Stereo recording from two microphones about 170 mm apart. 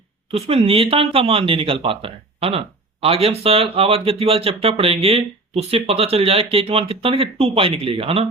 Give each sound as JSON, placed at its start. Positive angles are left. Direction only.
{"t": 0.3, "sound": "speech", "side_deg": -35}